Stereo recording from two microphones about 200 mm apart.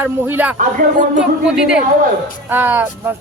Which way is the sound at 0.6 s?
40° right (ahead or behind).